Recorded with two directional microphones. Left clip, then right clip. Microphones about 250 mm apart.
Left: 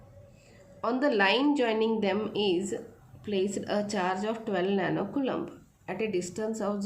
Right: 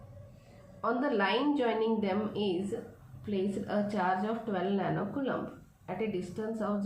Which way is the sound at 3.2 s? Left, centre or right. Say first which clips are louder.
Left 4 dB; left.